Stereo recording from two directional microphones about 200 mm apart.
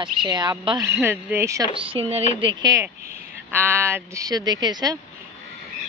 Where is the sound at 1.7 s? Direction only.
30° right (ahead or behind).